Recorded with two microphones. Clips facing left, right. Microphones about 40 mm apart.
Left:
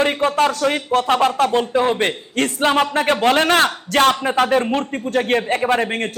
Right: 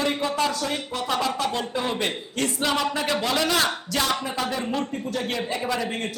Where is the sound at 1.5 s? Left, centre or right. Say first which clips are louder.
Left 9 dB; left.